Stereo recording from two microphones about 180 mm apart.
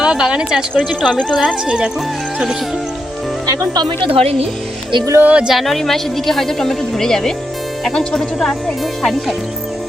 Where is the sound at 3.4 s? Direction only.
20° right (ahead or behind).